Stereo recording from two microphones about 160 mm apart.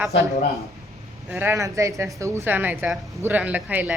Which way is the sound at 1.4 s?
15° right (ahead or behind).